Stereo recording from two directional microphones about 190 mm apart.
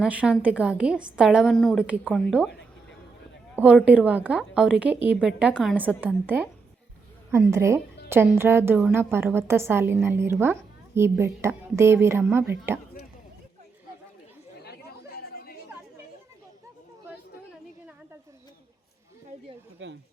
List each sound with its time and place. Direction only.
0.0 s a woman's voice: 5° right (ahead or behind)
3.6 s a woman's voice: 5° right (ahead or behind)
14.6 s chatter: 55° left (ahead or behind)
19.8 s speech: 80° right